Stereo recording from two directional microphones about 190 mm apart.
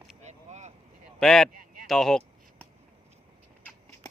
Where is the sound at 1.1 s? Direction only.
5° left (ahead or behind).